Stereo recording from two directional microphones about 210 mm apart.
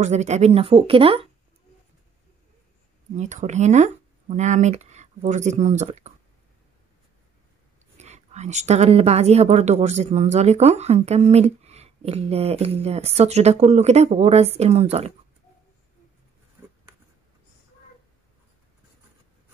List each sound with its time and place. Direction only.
0.0 s speech: 35° right (ahead or behind)
3.2 s speech: 35° right (ahead or behind)
8.0 s a woman's voice: 30° right (ahead or behind)